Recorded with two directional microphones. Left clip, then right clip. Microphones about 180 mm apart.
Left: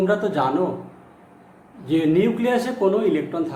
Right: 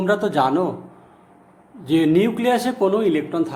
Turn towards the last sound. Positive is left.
turn(degrees=-65)  # may be behind; listen again after turning